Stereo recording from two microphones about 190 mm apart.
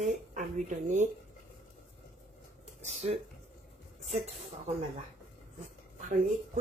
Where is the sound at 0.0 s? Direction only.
40° right (ahead or behind).